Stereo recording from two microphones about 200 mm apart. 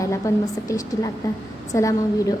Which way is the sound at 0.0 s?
15° left (ahead or behind).